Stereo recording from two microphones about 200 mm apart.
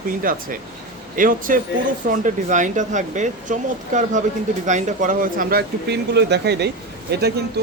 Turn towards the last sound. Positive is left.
turn(degrees=-55)  # may be behind; listen again after turning